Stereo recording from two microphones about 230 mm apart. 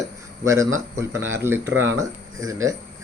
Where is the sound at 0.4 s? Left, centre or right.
Centre.